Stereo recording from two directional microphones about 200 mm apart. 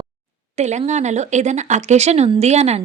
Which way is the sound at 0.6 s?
35° right (ahead or behind).